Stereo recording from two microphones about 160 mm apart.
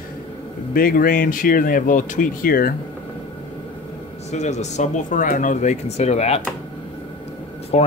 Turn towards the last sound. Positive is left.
turn(degrees=45)  # may be behind; listen again after turning